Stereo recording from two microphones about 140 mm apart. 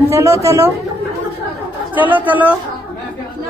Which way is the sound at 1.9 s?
10° right (ahead or behind).